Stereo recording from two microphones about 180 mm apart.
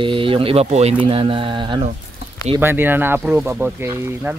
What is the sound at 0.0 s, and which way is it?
Speech, 30° right (ahead or behind).